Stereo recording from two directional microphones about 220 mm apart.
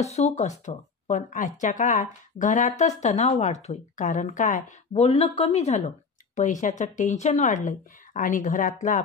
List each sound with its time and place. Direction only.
0.0 s speech: 30° left (ahead or behind)